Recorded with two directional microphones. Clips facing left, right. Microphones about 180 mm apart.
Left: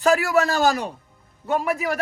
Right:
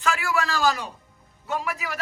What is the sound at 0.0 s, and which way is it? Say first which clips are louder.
A man's voice: left 7 dB; 35° left (ahead or behind).